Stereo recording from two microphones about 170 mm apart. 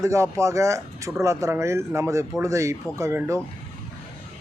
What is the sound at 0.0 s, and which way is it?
Speech, 15° right (ahead or behind).